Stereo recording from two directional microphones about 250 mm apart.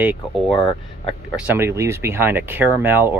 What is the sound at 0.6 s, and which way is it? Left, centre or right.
Speech, centre.